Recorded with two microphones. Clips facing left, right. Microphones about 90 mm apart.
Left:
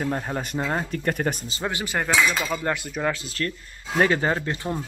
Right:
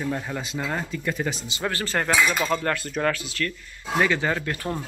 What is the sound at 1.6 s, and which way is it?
Speech, 15° left (ahead or behind).